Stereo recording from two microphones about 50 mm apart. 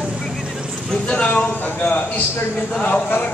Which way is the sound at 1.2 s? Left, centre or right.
Left.